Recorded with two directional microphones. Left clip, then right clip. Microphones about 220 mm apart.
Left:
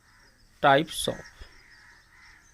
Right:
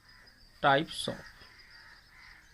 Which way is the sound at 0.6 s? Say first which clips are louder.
Left 5 dB; 40° left (ahead or behind).